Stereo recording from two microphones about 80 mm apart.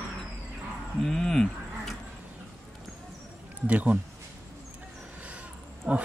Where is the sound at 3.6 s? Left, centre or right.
Centre.